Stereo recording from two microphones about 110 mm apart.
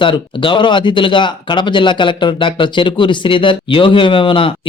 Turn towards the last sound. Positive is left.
turn(degrees=50)  # may be behind; listen again after turning